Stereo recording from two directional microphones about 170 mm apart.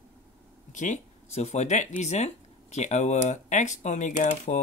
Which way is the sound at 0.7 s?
40° left (ahead or behind).